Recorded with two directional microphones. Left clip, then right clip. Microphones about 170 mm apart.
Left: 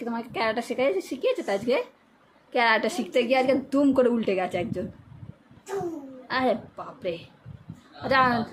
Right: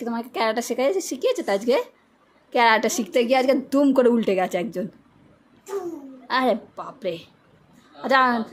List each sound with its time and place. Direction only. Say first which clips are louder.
0.0 s a woman's voice: right 3 dB; 20° right (ahead or behind)
6.2 s a woman's voice: right 4 dB; 25° right (ahead or behind)